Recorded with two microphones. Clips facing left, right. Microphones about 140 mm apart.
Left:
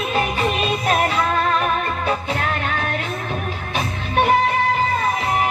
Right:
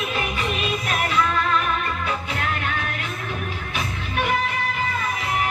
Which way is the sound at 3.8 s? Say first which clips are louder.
Left 7 dB; 35° left (ahead or behind).